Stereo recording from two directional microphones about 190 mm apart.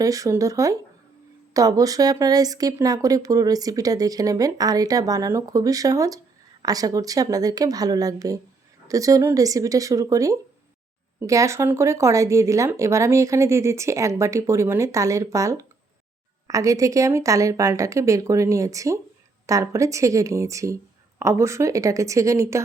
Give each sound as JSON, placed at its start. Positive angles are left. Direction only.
{"t": 0.0, "sound": "speech", "side_deg": -15}